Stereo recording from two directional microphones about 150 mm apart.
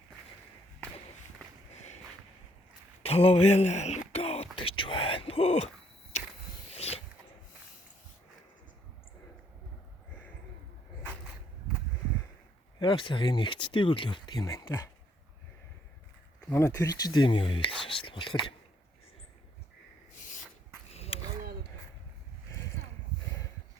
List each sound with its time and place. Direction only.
3.0 s speech: 40° left (ahead or behind)
4.1 s a sound: 40° left (ahead or behind)
4.5 s whispering: 35° left (ahead or behind)
6.7 s mechanisms: 45° left (ahead or behind)
12.8 s speech: 35° left (ahead or behind)
16.5 s speech: 20° left (ahead or behind)
20.9 s a sound: 40° left (ahead or behind)